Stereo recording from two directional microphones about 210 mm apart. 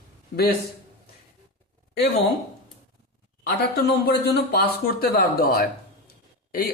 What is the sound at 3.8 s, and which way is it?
Speech, 50° left (ahead or behind).